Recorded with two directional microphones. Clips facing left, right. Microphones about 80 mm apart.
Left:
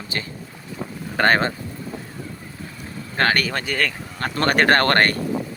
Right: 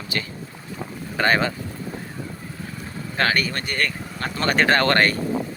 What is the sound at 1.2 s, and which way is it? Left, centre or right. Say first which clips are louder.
Speech: left 2 dB; left.